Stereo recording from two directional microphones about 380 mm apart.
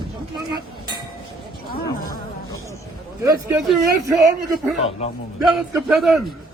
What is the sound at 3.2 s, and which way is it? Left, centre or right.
Speech, centre.